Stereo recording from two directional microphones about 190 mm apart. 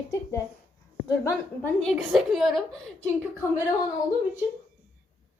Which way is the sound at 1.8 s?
Centre (ahead or behind).